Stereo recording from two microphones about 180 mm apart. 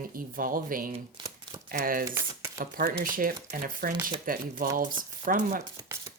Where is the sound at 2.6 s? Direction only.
50° right (ahead or behind).